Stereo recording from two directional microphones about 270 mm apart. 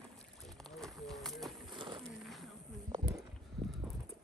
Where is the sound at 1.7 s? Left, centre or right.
Centre.